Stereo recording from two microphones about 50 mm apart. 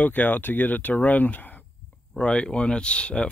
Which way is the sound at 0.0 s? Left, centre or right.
Left.